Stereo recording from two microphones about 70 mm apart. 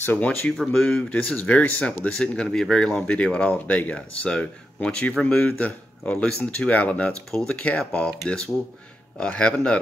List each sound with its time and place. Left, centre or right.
0.0 s speech: left
0.7 s speech: centre
7.1 s speech: centre
7.4 s speech: centre